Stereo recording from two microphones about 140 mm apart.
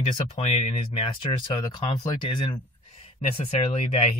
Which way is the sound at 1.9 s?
30° left (ahead or behind).